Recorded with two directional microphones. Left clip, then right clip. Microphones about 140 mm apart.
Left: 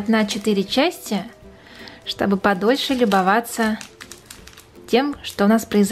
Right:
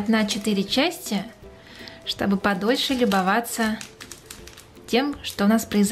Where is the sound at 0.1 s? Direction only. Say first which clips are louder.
Left 4 dB; 15° left (ahead or behind).